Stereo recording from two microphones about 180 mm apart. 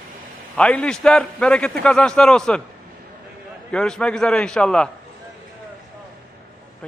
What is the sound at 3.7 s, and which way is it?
A man's voice, 5° left (ahead or behind).